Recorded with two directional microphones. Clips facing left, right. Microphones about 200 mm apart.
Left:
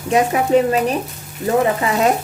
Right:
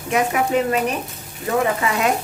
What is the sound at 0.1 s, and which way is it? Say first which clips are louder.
Speech: left 5 dB; 30° left (ahead or behind).